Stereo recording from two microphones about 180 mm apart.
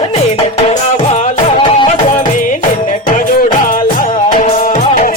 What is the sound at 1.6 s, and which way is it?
Music, 30° left (ahead or behind).